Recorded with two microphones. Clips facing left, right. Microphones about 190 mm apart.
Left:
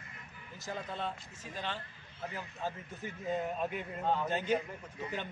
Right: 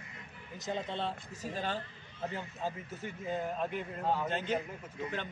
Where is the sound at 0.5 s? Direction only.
20° right (ahead or behind); by 1.8 s 40° right (ahead or behind).